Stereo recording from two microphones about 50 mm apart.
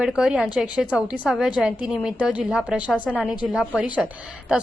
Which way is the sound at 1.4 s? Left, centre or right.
Centre.